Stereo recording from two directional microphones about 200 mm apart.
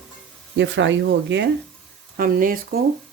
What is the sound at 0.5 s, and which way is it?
Speech, 65° right (ahead or behind).